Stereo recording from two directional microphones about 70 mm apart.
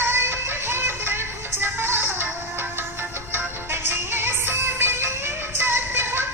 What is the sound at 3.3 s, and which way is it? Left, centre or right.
Music, right.